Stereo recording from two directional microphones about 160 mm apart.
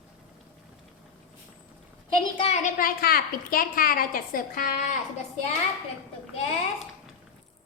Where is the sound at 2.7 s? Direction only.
65° left (ahead or behind).